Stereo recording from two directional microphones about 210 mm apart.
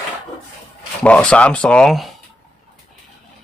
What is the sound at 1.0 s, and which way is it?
Speech, 5° left (ahead or behind).